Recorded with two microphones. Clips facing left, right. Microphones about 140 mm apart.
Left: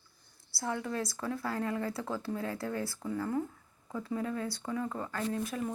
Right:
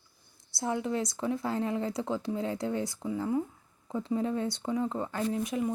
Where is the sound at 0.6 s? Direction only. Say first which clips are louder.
Right 4 dB; 20° right (ahead or behind).